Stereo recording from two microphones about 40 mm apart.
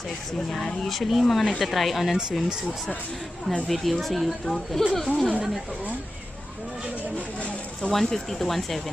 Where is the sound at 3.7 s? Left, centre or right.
Centre.